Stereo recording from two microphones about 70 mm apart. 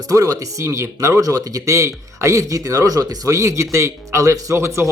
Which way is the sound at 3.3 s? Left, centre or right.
Right.